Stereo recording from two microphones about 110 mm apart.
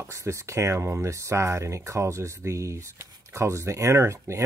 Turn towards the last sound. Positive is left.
turn(degrees=-25)  # may be behind; listen again after turning